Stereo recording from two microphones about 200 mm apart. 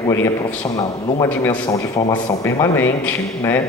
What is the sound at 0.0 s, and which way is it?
A man's voice, 15° left (ahead or behind).